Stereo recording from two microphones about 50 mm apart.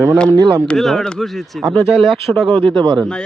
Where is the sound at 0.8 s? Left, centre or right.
Centre.